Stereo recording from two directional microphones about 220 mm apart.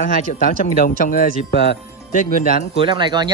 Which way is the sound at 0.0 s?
40° left (ahead or behind).